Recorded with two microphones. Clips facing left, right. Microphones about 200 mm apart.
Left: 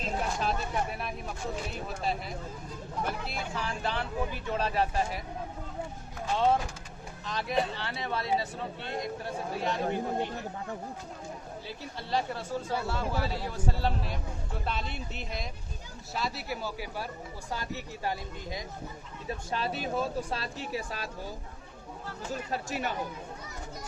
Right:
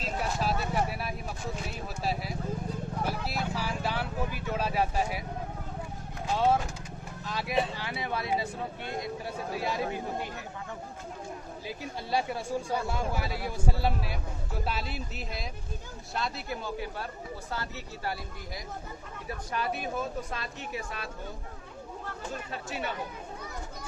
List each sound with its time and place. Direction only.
0.0 s vehicle: 5° right (ahead or behind)
2.0 s a woman's voice: 5° right (ahead or behind)
6.3 s speech: 10° right (ahead or behind)
11.8 s a woman's voice: 10° right (ahead or behind); by 21.3 s 35° left (ahead or behind)
22.4 s speech: 40° left (ahead or behind)